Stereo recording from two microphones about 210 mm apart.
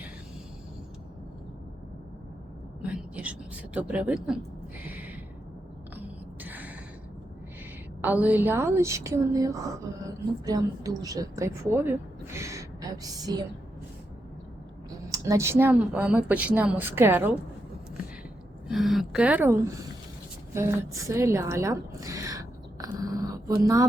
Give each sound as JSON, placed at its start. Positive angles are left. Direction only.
{"t": 2.8, "sound": "a sound", "side_deg": -5}
{"t": 6.4, "sound": "gasp", "side_deg": -10}
{"t": 8.0, "sound": "a woman's voice", "side_deg": -5}
{"t": 15.1, "sound": "speech", "side_deg": -15}
{"t": 18.7, "sound": "speech", "side_deg": 0}
{"t": 20.5, "sound": "a sound", "side_deg": -10}